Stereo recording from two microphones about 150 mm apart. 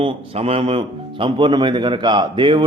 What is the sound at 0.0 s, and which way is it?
A man's voice, 40° right (ahead or behind).